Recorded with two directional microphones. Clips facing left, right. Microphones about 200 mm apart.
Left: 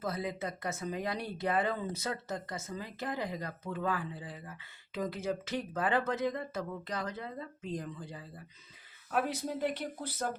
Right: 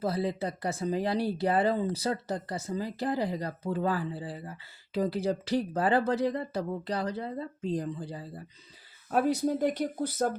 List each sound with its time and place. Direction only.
0.0 s speech: 30° right (ahead or behind)